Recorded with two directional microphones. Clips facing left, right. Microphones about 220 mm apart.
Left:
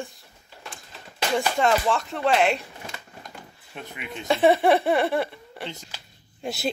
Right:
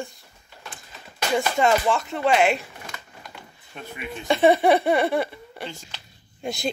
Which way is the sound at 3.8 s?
20° left (ahead or behind).